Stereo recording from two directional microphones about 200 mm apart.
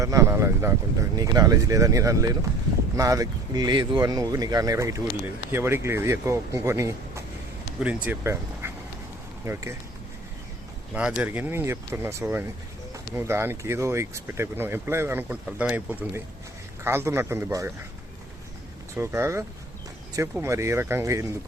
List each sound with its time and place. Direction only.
0.0 s speech: 15° right (ahead or behind)
10.9 s speech: 5° right (ahead or behind)
18.9 s speech: 10° right (ahead or behind)